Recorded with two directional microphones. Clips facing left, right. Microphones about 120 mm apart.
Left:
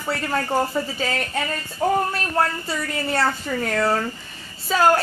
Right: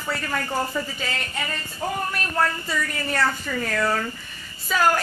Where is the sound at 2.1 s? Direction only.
30° left (ahead or behind).